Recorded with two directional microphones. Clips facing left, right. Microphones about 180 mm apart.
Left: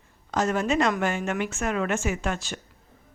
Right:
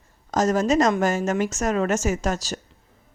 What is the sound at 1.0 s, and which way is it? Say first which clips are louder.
A woman's voice: right 5 dB; 40° right (ahead or behind).